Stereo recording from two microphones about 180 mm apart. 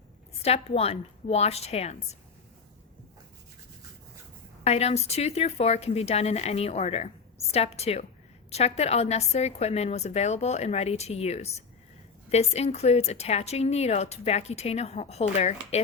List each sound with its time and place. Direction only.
0.4 s speech: 35° left (ahead or behind)
4.6 s speech: 35° left (ahead or behind)